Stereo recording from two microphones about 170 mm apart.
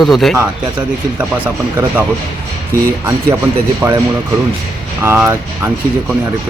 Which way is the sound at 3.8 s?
15° right (ahead or behind).